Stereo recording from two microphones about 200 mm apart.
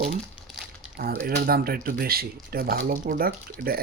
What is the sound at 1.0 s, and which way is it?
Speech, 45° right (ahead or behind).